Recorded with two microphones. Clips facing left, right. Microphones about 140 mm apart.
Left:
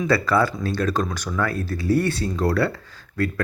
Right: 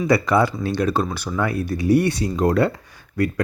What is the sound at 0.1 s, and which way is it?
Speech, 20° right (ahead or behind).